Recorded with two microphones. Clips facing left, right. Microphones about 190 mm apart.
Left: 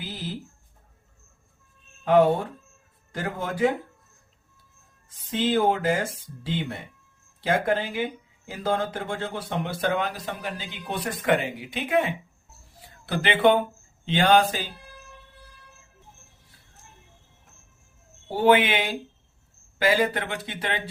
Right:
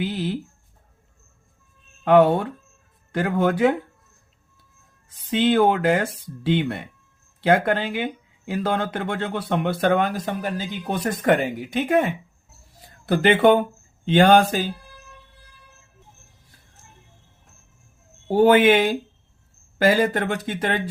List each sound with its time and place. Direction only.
0.0 s speech: 65° right (ahead or behind)
2.0 s speech: 65° right (ahead or behind)
5.0 s speech: 65° right (ahead or behind); by 14.7 s 50° right (ahead or behind)
18.3 s speech: 45° right (ahead or behind)